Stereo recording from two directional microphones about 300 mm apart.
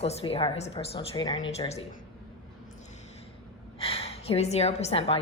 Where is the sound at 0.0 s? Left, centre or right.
Centre.